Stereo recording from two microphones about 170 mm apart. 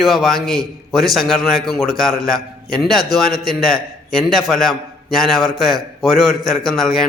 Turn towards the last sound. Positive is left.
turn(degrees=0)  # may be behind; listen again after turning